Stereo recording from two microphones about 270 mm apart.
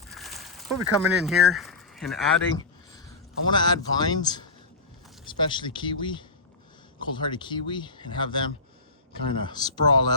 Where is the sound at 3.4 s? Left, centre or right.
Centre.